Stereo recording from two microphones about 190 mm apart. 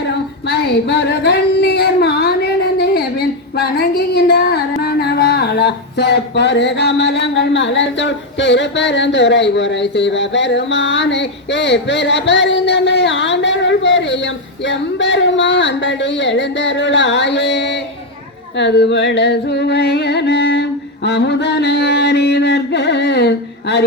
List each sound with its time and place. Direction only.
0.4 s singing: 60° left (ahead or behind)
4.8 s a sound: 55° left (ahead or behind)
18.5 s music: 65° left (ahead or behind)